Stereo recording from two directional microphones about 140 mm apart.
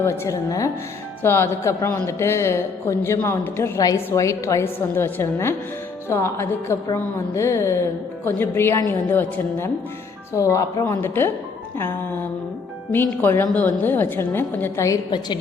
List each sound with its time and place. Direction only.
0.0 s speech: 20° left (ahead or behind)
12.9 s speech: 15° left (ahead or behind)